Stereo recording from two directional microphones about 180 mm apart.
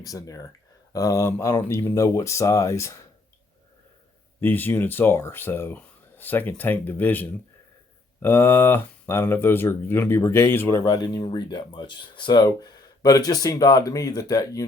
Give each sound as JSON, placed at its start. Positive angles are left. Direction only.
{"t": 0.0, "sound": "speech", "side_deg": 20}
{"t": 4.4, "sound": "speech", "side_deg": 10}